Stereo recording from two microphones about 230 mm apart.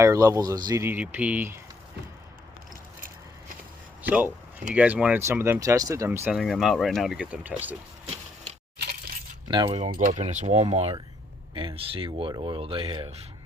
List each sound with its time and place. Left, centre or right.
0.0 s speech: centre
4.7 s speech: centre
8.8 s coin: right
9.5 s speech: right